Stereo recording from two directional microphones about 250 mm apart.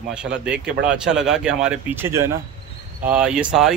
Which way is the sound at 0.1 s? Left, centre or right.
Centre.